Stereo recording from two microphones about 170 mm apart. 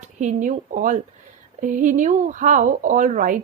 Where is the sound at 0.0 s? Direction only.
45° right (ahead or behind).